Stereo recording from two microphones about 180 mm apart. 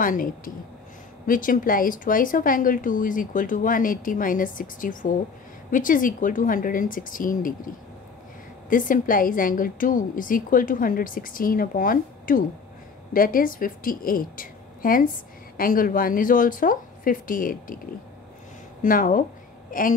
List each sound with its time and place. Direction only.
0.0 s speech: 50° left (ahead or behind)
8.6 s speech: 50° left (ahead or behind)
18.8 s speech: 50° left (ahead or behind)